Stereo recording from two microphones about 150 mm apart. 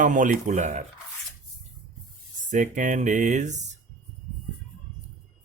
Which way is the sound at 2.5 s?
55° right (ahead or behind).